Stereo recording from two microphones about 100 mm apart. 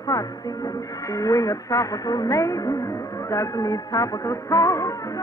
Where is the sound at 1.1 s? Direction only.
35° left (ahead or behind).